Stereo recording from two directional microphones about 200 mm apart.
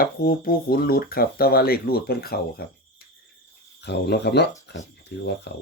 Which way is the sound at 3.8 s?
55° left (ahead or behind).